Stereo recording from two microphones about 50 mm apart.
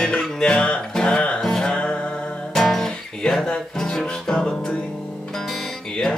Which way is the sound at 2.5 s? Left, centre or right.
Centre.